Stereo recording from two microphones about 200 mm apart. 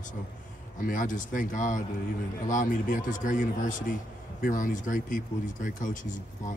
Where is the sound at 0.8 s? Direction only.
40° left (ahead or behind).